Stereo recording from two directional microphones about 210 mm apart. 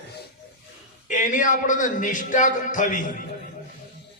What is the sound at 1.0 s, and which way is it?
A man's voice, 40° left (ahead or behind).